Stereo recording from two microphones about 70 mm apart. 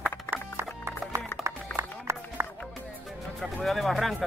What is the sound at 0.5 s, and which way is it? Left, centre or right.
Music, right.